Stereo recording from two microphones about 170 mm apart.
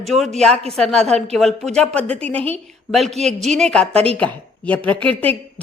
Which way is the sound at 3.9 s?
35° right (ahead or behind).